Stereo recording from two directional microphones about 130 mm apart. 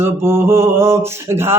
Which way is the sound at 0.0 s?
20° right (ahead or behind).